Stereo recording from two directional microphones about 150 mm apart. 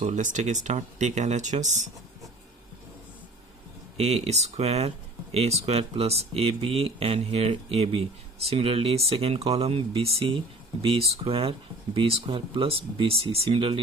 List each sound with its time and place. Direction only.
0.0 s speech: 55° right (ahead or behind)
3.9 s speech: 45° right (ahead or behind)